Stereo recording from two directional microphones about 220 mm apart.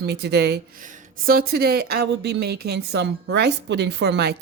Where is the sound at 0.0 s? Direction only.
45° right (ahead or behind).